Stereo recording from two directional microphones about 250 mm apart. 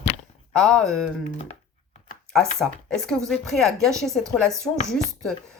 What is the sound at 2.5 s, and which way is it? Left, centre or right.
Speech, centre.